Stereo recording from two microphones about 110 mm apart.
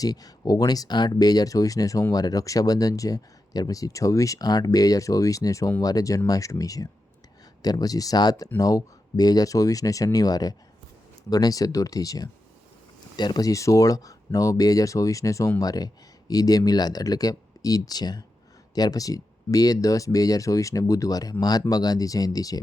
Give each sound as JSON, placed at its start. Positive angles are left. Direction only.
{"t": 0.0, "sound": "speech", "side_deg": 35}